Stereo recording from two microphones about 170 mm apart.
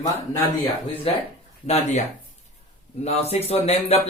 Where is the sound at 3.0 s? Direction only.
40° left (ahead or behind).